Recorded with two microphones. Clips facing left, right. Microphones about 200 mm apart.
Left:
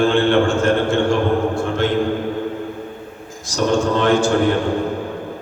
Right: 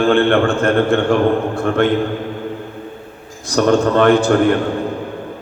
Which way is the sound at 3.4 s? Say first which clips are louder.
Right 4 dB; 60° right (ahead or behind).